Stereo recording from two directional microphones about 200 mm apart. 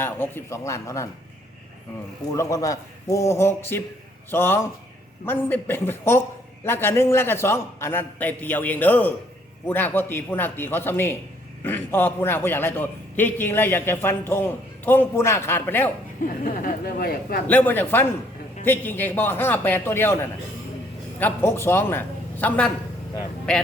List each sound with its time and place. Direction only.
0.0 s a man's voice: 10° left (ahead or behind)
2.3 s a man's voice: 15° left (ahead or behind)
16.4 s speech: 45° left (ahead or behind)
17.4 s a man's voice: 10° left (ahead or behind)
21.2 s a man's voice: 10° left (ahead or behind)